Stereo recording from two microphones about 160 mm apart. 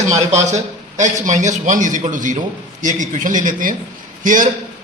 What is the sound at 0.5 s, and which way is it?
A man's voice, 50° right (ahead or behind).